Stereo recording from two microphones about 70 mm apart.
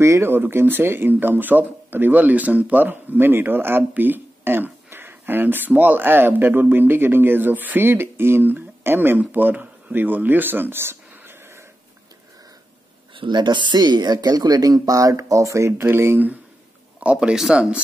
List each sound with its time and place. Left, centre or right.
0.0 s speech: right
13.3 s speech: right
17.0 s speech: centre